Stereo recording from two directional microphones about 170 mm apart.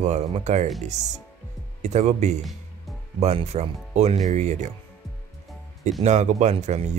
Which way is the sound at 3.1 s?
40° right (ahead or behind).